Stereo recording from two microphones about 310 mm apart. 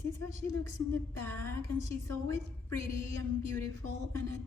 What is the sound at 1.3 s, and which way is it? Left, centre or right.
Speech, centre.